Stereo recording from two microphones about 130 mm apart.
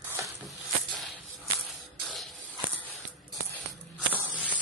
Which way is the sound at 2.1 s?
Centre (ahead or behind).